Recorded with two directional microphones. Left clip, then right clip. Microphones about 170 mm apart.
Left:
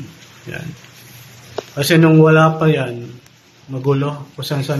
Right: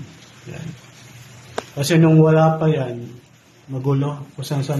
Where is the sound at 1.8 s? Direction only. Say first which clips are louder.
Left 4 dB; centre (ahead or behind).